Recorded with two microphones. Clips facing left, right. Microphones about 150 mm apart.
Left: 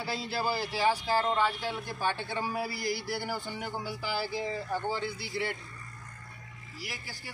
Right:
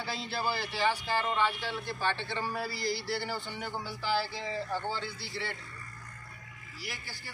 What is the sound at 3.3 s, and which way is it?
Speech, 45° left (ahead or behind).